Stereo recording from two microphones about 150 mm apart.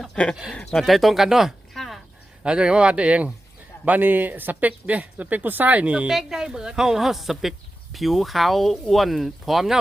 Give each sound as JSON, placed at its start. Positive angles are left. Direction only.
{"t": 0.0, "sound": "speech", "side_deg": 5}